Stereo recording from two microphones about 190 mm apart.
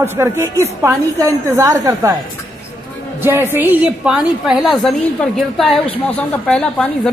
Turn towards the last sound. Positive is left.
turn(degrees=5)  # may be behind; listen again after turning